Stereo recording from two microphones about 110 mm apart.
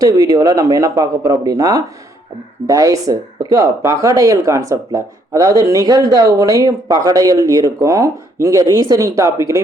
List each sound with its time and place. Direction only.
0.0 s speech: 30° right (ahead or behind)